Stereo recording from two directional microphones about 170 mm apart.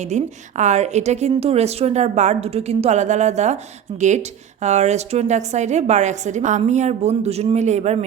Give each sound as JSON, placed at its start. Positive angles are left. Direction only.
{"t": 0.0, "sound": "a woman's voice", "side_deg": -45}